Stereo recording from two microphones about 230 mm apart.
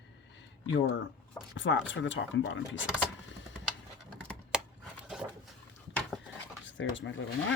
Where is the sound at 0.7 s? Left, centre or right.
Left.